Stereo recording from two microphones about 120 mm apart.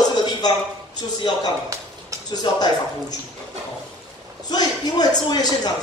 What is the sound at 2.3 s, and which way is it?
Speech, 35° left (ahead or behind).